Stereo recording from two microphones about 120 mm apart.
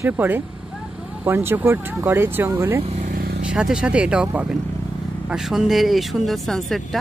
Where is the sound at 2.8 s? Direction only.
65° right (ahead or behind).